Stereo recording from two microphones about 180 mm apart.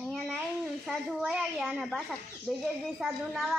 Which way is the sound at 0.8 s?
Centre (ahead or behind).